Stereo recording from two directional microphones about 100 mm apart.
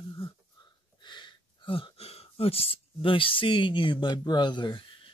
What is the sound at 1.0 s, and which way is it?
Speech, 50° left (ahead or behind).